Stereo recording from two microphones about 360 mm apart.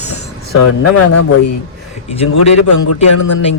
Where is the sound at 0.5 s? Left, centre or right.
Left.